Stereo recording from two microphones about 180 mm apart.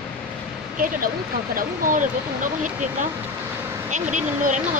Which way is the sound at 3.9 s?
45° right (ahead or behind).